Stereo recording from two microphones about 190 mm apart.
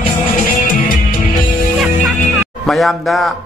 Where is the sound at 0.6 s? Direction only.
45° left (ahead or behind).